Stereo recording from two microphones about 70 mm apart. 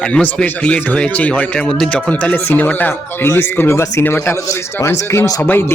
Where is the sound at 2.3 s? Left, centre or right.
Left.